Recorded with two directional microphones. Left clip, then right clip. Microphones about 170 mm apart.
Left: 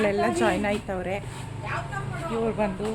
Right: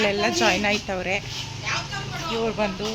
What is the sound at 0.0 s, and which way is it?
Speech, 10° left (ahead or behind).